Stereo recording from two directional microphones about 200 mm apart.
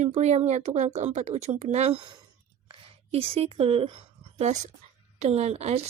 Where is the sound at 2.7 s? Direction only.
30° right (ahead or behind).